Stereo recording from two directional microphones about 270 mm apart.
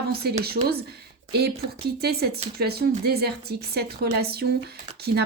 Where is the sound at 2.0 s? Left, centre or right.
Right.